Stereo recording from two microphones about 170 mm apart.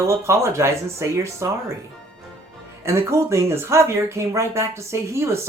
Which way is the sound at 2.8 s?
15° right (ahead or behind).